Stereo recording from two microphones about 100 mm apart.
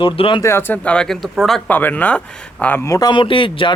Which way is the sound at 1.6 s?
15° left (ahead or behind).